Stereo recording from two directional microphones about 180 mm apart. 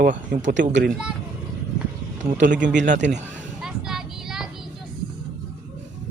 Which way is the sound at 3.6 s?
Centre (ahead or behind).